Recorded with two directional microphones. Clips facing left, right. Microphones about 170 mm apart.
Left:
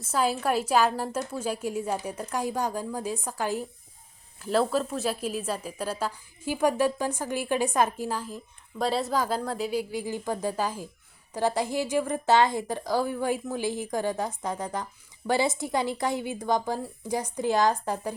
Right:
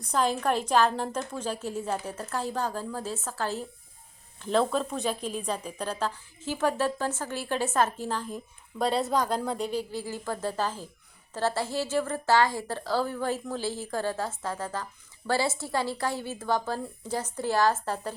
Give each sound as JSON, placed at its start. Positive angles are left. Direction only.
{"t": 0.0, "sound": "a woman's voice", "side_deg": 5}